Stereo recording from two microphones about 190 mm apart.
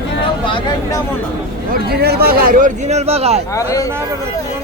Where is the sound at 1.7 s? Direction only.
55° right (ahead or behind); by 3.4 s 35° right (ahead or behind).